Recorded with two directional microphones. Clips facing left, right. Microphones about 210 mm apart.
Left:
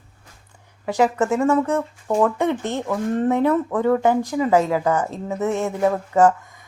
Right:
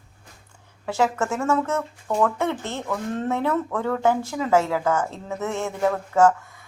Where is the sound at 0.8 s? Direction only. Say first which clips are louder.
Left 4 dB; 15° left (ahead or behind).